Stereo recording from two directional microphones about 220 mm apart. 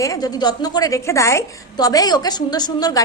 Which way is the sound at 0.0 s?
15° left (ahead or behind).